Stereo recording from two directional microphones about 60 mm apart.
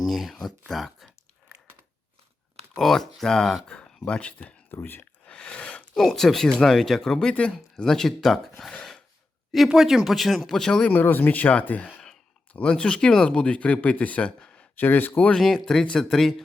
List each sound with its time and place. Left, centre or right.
0.0 s speech: centre
2.7 s speech: centre
3.7 s speech: centre
5.2 s a sound: centre
5.9 s speech: centre
9.6 s speech: centre
10.8 s speech: left
14.8 s speech: left
15.4 s speech: centre